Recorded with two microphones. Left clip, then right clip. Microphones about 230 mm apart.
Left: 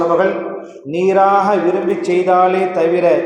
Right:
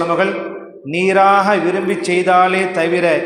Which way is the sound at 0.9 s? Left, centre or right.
Right.